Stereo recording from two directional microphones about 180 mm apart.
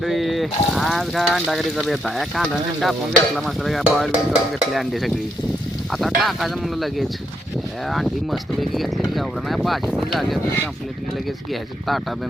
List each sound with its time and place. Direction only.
0.0 s speech: centre (ahead or behind)